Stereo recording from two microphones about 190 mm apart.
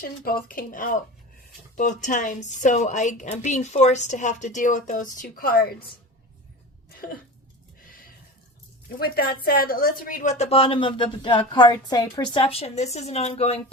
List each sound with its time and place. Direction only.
0.0 s a woman's voice: 50° left (ahead or behind)
9.0 s a woman's voice: 55° left (ahead or behind); by 13.6 s 30° left (ahead or behind)